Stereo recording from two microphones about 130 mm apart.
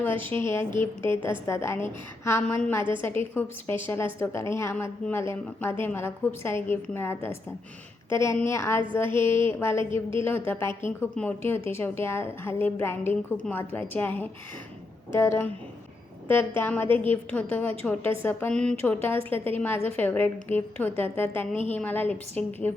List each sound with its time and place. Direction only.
0.0 s a woman's voice: 15° left (ahead or behind)